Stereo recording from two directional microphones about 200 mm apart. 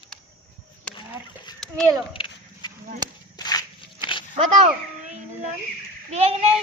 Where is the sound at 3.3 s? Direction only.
20° left (ahead or behind).